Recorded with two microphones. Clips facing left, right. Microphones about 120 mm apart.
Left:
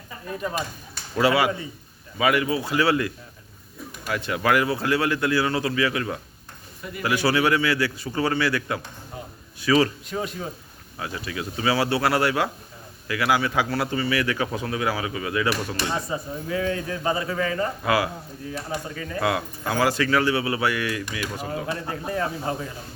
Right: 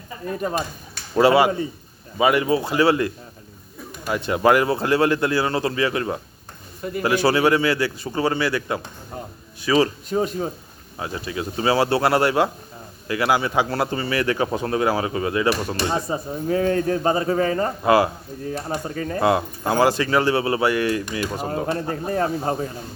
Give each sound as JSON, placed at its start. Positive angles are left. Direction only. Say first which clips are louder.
{"t": 1.1, "sound": "a man's voice", "louder": "right 5 dB", "side_deg": -35}
{"t": 2.6, "sound": "a man's voice", "louder": "right 3 dB", "side_deg": -25}
{"t": 9.7, "sound": "a man's voice", "louder": "right 3 dB", "side_deg": -30}